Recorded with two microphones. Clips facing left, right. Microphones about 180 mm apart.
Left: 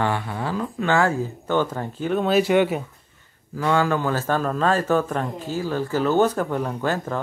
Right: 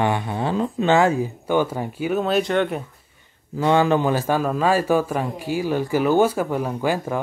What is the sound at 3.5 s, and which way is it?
A man's voice, 20° right (ahead or behind).